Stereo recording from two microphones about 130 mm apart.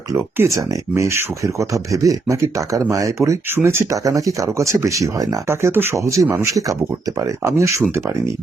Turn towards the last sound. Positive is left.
turn(degrees=-20)  # may be behind; listen again after turning